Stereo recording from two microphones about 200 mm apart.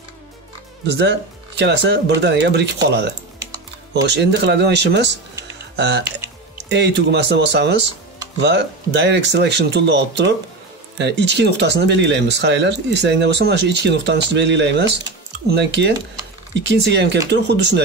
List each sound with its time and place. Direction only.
1.6 s speech: 60° right (ahead or behind)